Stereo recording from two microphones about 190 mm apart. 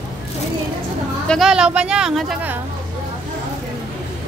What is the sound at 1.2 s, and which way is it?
Speech, centre (ahead or behind).